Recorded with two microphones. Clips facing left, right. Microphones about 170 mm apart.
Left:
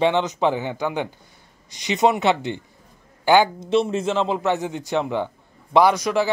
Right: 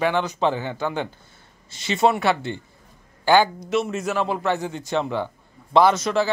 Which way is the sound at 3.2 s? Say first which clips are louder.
Left 1 dB; 15° left (ahead or behind).